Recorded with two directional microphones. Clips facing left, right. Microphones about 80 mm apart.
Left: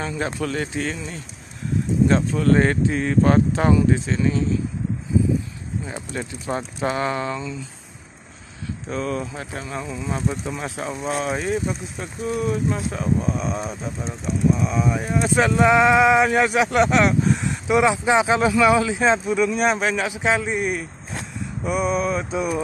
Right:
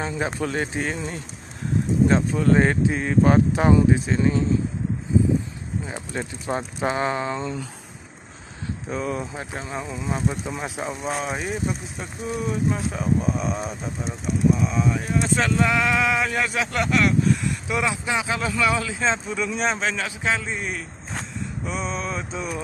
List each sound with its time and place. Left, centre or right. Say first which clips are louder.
0.2 s speech: even; right
2.0 s speech: left 1 dB; centre
4.2 s speech: even; right
6.1 s speech: even; right
8.8 s speech: left 2 dB; centre
21.6 s mantra: left 8 dB; centre